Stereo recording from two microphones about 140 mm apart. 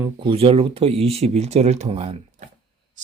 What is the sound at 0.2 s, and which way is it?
Speech, 40° right (ahead or behind).